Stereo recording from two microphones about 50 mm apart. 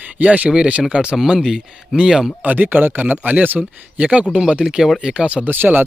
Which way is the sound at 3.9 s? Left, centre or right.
Right.